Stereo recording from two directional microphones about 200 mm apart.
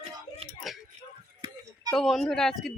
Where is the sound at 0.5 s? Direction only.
Centre (ahead or behind).